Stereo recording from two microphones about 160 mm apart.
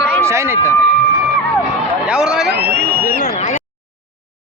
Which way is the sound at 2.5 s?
80° right.